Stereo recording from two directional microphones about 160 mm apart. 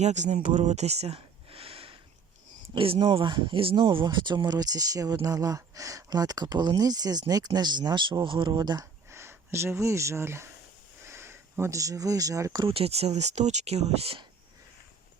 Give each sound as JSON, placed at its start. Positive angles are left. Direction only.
{"t": 0.0, "sound": "speech", "side_deg": -45}
{"t": 0.4, "sound": "a sound", "side_deg": -50}
{"t": 2.6, "sound": "speech", "side_deg": -35}
{"t": 12.6, "sound": "speech", "side_deg": -40}